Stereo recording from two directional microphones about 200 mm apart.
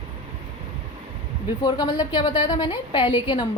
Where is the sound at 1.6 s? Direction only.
20° left (ahead or behind).